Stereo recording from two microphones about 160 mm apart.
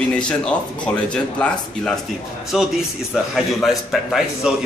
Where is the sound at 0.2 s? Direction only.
5° left (ahead or behind).